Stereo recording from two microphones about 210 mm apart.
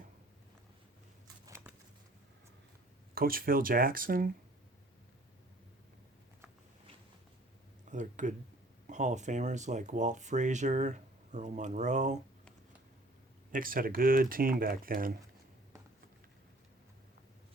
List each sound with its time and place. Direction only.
1.5 s a sound: 10° right (ahead or behind)
3.2 s speech: 45° right (ahead or behind)
7.9 s speech: 35° right (ahead or behind)
13.5 s speech: 40° right (ahead or behind)